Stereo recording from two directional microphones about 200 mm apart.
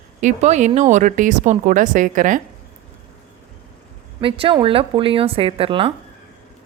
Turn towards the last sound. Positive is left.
turn(degrees=-25)  # may be behind; listen again after turning